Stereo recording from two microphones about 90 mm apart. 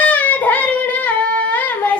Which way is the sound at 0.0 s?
20° left (ahead or behind).